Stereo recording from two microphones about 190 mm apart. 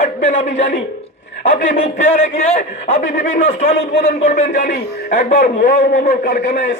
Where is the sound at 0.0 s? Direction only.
40° left (ahead or behind).